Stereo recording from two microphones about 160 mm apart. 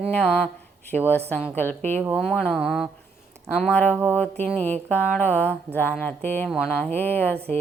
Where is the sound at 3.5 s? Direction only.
10° left (ahead or behind).